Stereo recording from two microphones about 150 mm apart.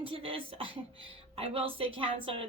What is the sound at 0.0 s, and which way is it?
A woman's voice, 35° right (ahead or behind).